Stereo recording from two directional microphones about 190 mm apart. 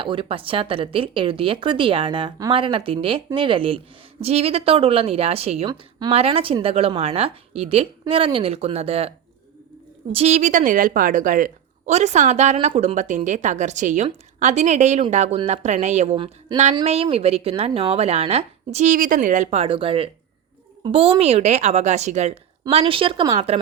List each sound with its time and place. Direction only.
0.0 s a woman's voice: 25° right (ahead or behind)